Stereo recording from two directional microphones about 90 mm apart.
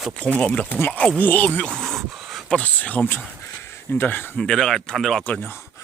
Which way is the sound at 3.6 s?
30° left (ahead or behind).